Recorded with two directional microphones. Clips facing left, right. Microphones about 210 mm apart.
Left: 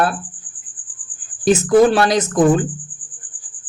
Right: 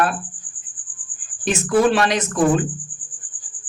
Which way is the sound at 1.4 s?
40° left (ahead or behind).